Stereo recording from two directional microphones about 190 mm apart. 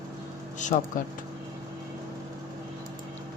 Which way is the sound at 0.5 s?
40° left (ahead or behind).